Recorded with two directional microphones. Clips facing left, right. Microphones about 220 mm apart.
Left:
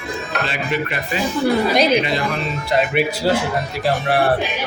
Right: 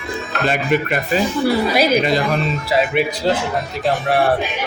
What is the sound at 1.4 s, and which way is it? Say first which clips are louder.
A woman's voice: left 3 dB; 5° right (ahead or behind).